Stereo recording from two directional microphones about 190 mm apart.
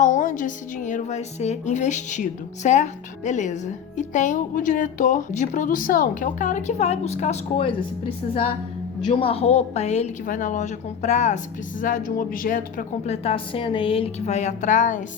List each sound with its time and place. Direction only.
0.0 s a woman's voice: 40° left (ahead or behind)